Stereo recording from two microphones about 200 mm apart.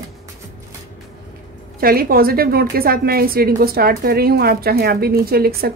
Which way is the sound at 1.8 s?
50° right (ahead or behind).